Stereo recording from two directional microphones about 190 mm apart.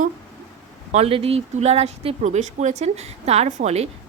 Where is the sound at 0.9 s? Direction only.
30° right (ahead or behind).